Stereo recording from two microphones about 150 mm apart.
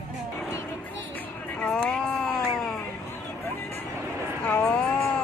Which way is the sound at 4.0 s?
15° right (ahead or behind).